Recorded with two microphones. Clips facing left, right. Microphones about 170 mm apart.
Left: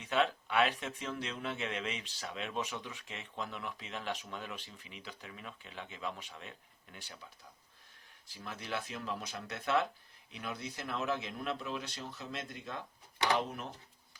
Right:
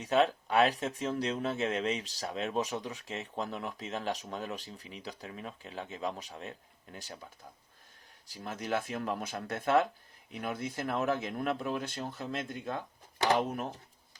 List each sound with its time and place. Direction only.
0.0 s speech: 40° right (ahead or behind)
8.3 s speech: 40° right (ahead or behind)